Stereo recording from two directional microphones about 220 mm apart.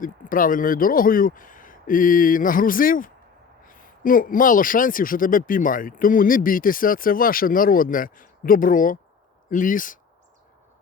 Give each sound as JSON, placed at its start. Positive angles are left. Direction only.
{"t": 0.0, "sound": "a man's voice", "side_deg": 40}